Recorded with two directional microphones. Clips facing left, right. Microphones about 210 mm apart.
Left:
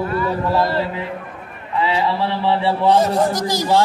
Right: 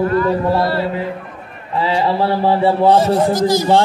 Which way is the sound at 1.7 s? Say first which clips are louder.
Right 3 dB; 40° right (ahead or behind).